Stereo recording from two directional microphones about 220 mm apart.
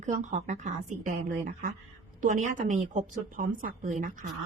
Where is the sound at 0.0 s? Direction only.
35° right (ahead or behind).